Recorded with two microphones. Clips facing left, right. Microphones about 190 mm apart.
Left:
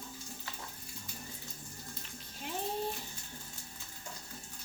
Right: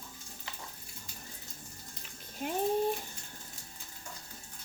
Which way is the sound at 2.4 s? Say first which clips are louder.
Right 6 dB; 50° right (ahead or behind).